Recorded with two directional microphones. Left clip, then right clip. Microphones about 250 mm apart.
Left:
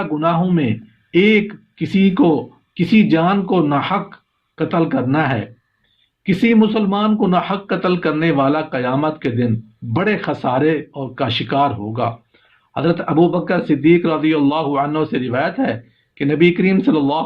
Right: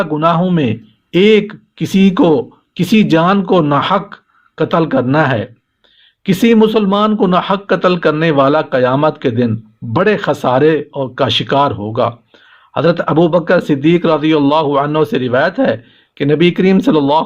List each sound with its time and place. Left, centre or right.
0.0 s a man's voice: right